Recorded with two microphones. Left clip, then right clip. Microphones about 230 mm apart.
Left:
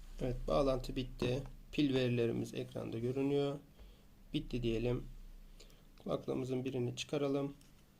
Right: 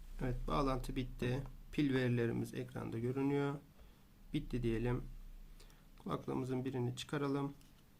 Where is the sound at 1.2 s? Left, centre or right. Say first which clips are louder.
Left 6 dB; right.